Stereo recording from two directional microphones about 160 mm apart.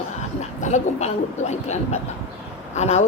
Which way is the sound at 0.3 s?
45° left (ahead or behind).